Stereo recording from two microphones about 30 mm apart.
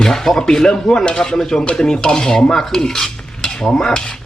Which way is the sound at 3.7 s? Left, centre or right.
Left.